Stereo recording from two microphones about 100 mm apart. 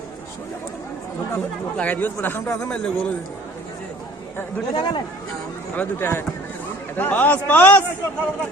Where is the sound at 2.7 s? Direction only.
10° left (ahead or behind).